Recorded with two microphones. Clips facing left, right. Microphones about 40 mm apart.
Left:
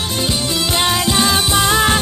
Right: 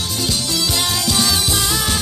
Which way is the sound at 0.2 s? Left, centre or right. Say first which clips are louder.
Left 2 dB; left.